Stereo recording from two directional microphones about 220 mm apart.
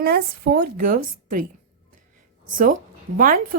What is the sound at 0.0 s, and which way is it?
A woman's voice, 45° right (ahead or behind).